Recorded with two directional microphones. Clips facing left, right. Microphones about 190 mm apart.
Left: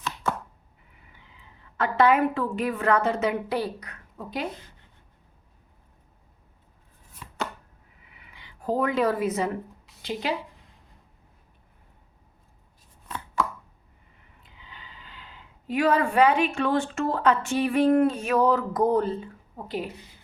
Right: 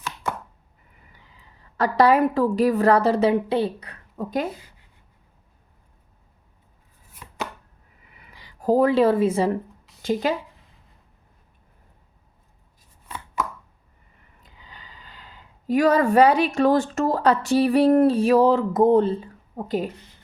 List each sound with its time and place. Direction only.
0.0 s chopping: 10° right (ahead or behind)
1.1 s a woman's voice: 40° right (ahead or behind)
4.2 s speech: 45° right (ahead or behind)
8.2 s speech: 40° right (ahead or behind)
10.0 s speech: 45° right (ahead or behind)
14.4 s speech: 40° right (ahead or behind)
19.5 s speech: 45° right (ahead or behind)